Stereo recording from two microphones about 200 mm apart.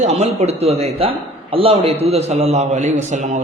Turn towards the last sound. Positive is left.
turn(degrees=-35)  # may be behind; listen again after turning